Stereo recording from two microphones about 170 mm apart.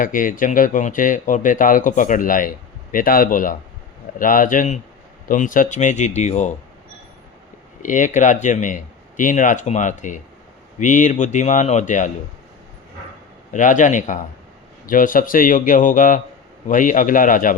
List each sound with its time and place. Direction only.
0.0 s speech: 50° left (ahead or behind)
7.8 s speech: 50° left (ahead or behind)
13.5 s speech: 50° left (ahead or behind)